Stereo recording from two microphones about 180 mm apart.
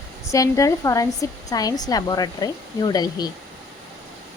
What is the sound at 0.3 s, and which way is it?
Speech, 15° left (ahead or behind).